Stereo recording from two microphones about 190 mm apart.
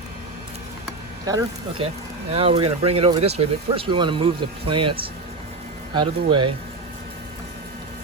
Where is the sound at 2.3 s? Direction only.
30° right (ahead or behind).